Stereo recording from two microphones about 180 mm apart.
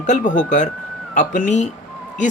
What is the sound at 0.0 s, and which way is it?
Speech, 45° left (ahead or behind).